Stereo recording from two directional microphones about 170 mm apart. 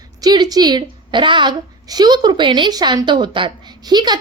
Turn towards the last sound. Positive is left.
turn(degrees=-25)  # may be behind; listen again after turning